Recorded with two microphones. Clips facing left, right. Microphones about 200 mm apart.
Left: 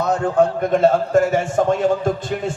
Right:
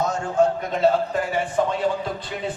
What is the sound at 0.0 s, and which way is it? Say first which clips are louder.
A man's voice: left 4 dB; 60° left (ahead or behind).